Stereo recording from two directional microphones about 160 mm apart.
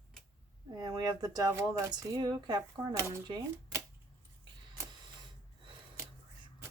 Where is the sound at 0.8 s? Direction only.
25° right (ahead or behind).